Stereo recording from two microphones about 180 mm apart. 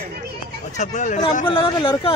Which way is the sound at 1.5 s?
30° left (ahead or behind).